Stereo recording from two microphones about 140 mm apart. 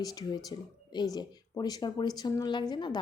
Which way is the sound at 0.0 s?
25° left (ahead or behind).